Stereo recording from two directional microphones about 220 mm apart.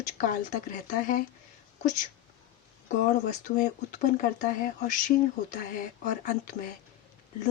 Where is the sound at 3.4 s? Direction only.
35° left (ahead or behind).